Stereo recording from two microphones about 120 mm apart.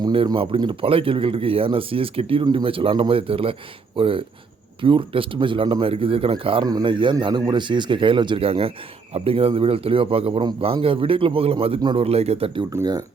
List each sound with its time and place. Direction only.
0.0 s speech: 40° right (ahead or behind)
11.8 s speech: 40° right (ahead or behind)
12.0 s speech: 60° right (ahead or behind)
12.7 s speech: 30° right (ahead or behind)